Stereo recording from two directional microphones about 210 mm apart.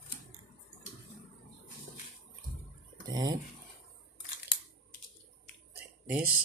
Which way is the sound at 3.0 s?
20° right (ahead or behind).